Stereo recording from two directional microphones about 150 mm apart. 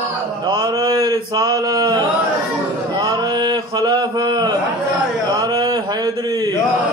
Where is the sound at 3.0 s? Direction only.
25° right (ahead or behind).